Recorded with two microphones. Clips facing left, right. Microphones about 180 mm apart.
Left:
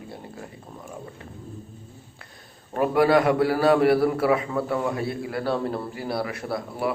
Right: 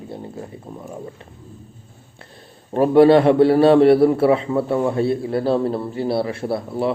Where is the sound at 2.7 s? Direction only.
30° right (ahead or behind).